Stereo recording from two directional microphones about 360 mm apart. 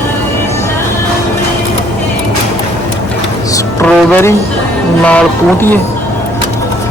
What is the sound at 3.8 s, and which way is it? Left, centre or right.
Music, centre.